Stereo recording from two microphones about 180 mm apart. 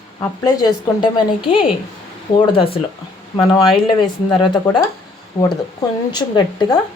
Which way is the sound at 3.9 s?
25° left (ahead or behind).